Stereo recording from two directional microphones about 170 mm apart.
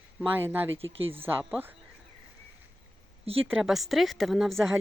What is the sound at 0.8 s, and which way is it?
Speech, 35° right (ahead or behind).